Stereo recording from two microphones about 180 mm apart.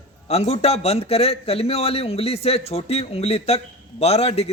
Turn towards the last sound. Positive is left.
turn(degrees=35)  # may be behind; listen again after turning